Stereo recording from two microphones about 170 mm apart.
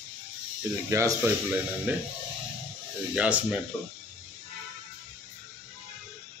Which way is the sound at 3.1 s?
5° right (ahead or behind).